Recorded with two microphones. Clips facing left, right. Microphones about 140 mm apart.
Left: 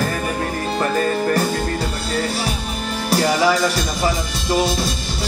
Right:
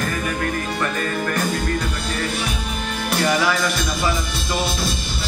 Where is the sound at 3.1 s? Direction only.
35° left (ahead or behind).